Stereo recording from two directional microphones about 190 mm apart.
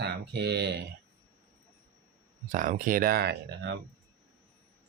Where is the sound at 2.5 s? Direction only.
40° right (ahead or behind); by 3.8 s 60° right (ahead or behind).